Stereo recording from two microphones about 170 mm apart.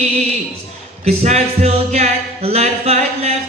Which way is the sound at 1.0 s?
40° right (ahead or behind).